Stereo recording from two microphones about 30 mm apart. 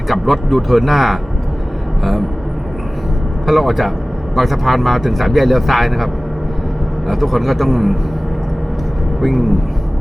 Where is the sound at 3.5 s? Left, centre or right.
Centre.